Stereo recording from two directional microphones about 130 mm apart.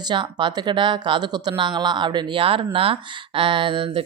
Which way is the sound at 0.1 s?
40° right (ahead or behind).